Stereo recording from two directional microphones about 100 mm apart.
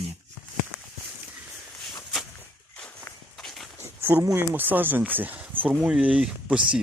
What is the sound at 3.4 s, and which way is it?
Walk, centre (ahead or behind).